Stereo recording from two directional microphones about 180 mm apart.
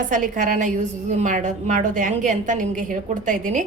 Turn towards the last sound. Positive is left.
turn(degrees=-45)  # may be behind; listen again after turning